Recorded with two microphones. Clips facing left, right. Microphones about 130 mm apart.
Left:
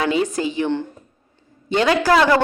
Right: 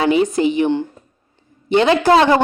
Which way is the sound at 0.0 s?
20° right (ahead or behind).